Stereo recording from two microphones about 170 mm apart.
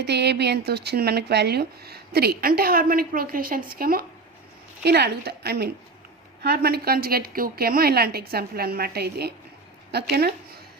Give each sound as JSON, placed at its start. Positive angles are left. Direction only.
{"t": 0.0, "sound": "a woman's voice", "side_deg": -80}